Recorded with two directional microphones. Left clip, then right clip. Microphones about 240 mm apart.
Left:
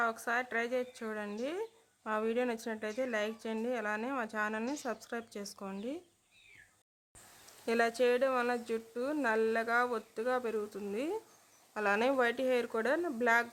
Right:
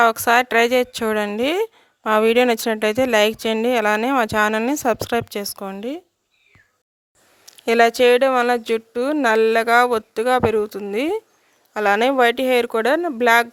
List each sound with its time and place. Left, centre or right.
0.0 s a woman's voice: right
7.4 s speech: right